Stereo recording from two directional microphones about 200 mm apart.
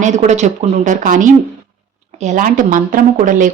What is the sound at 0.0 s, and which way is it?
Speech, 35° right (ahead or behind).